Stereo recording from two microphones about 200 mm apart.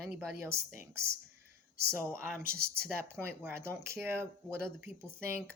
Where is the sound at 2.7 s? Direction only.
10° right (ahead or behind).